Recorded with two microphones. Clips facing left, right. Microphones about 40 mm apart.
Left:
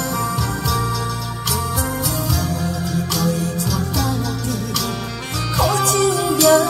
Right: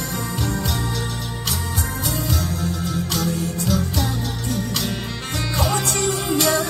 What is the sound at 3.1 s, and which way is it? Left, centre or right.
Music, right.